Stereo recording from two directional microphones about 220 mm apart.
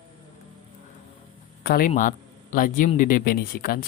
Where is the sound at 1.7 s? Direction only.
40° left (ahead or behind).